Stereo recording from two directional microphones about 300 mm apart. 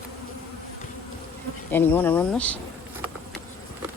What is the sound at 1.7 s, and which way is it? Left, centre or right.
Speech, centre.